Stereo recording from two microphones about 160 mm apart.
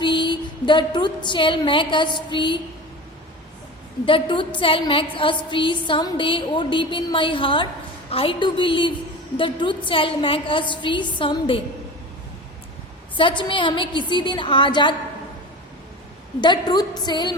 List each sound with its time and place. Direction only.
0.0 s a woman's voice: 30° left (ahead or behind)
4.0 s a woman's voice: 30° left (ahead or behind)
13.1 s a woman's voice: 30° left (ahead or behind)
16.4 s a woman's voice: 25° left (ahead or behind)